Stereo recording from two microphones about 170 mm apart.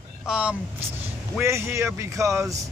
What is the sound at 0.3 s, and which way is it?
Speech, 5° right (ahead or behind).